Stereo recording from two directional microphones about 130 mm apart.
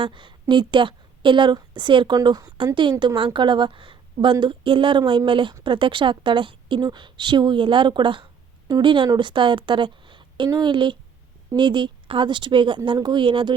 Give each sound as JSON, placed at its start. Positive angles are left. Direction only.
{"t": 0.0, "sound": "a woman's voice", "side_deg": -40}